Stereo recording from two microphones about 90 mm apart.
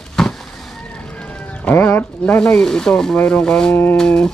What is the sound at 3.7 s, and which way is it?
Speech, 25° left (ahead or behind).